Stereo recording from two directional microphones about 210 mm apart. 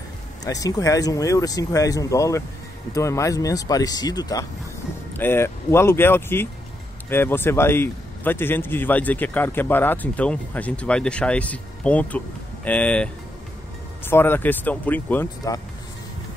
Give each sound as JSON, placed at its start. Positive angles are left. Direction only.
{"t": 0.4, "sound": "a man's voice", "side_deg": 15}